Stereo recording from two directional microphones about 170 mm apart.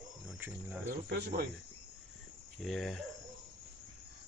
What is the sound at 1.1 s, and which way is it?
Speech, 65° right (ahead or behind).